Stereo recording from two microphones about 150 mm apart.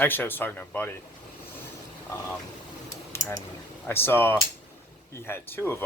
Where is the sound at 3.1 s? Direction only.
20° left (ahead or behind).